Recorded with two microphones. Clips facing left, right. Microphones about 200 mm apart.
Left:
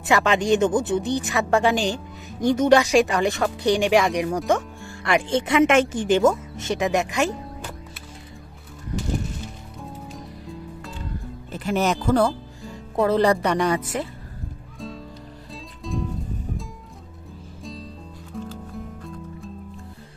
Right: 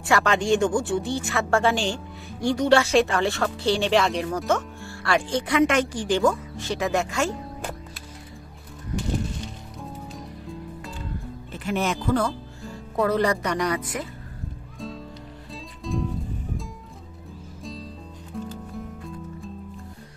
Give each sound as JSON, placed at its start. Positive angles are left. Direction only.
{"t": 0.0, "sound": "speech", "side_deg": 20}
{"t": 9.4, "sound": "music", "side_deg": 0}
{"t": 11.5, "sound": "speech", "side_deg": 40}
{"t": 15.8, "sound": "music", "side_deg": 0}
{"t": 18.3, "sound": "music", "side_deg": 0}